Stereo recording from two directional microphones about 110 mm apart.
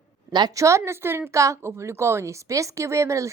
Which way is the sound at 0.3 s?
35° right (ahead or behind).